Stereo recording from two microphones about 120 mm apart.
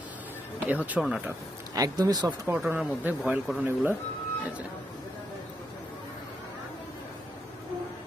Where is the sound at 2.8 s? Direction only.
10° right (ahead or behind).